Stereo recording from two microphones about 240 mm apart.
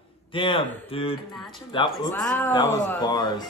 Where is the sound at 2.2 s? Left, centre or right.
Centre.